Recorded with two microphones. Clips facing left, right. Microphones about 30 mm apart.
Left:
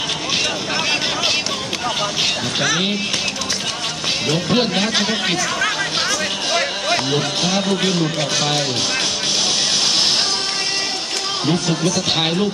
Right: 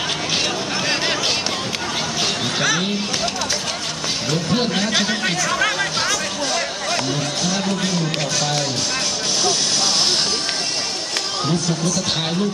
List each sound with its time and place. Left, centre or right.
2.6 s speech: centre
4.3 s speech: centre
4.9 s speech: centre
5.5 s chatter: centre
6.5 s music: left
8.4 s speech: left